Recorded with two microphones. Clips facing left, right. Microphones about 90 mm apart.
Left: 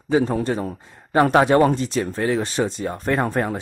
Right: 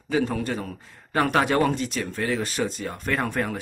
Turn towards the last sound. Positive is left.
turn(degrees=30)  # may be behind; listen again after turning